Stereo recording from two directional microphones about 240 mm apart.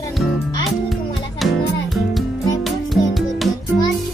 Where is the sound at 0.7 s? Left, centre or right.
Centre.